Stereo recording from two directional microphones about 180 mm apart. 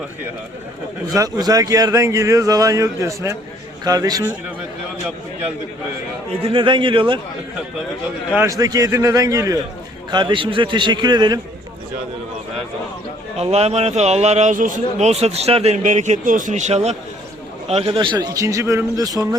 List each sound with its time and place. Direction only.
1.0 s a man's voice: 20° right (ahead or behind)
6.4 s a man's voice: 30° right (ahead or behind)
8.4 s a man's voice: 20° right (ahead or behind)
13.3 s a man's voice: 35° right (ahead or behind); by 19.2 s 20° right (ahead or behind)